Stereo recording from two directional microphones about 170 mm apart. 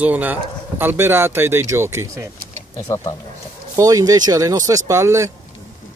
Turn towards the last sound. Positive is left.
turn(degrees=-15)  # may be behind; listen again after turning